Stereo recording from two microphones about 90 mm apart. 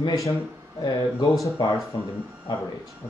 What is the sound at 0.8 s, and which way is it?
Speech, 50° left (ahead or behind).